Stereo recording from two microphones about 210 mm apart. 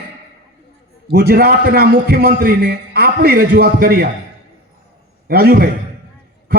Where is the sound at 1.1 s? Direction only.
45° right (ahead or behind).